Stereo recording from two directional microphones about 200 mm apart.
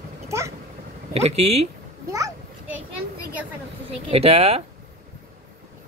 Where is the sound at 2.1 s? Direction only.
15° right (ahead or behind).